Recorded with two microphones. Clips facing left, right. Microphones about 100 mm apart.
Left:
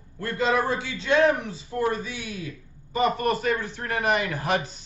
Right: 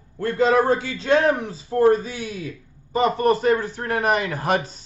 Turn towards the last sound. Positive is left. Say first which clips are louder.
# right 3 dB
turn(degrees=-35)  # may be behind; listen again after turning